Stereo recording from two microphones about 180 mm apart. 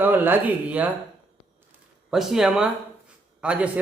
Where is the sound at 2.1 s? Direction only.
Centre (ahead or behind).